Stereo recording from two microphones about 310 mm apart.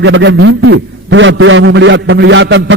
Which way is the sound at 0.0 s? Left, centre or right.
Right.